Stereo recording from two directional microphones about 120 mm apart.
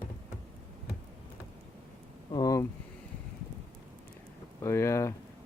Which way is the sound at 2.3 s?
35° left (ahead or behind).